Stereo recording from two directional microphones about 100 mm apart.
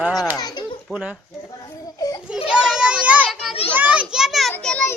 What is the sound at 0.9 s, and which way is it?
Speech, 10° right (ahead or behind).